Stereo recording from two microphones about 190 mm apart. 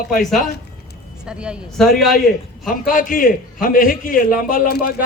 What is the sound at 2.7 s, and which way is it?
A man's voice, 45° left (ahead or behind).